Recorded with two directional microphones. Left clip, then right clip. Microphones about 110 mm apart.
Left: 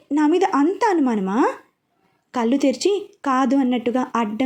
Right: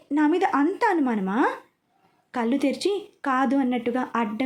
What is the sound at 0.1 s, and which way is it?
A woman's voice, 20° left (ahead or behind).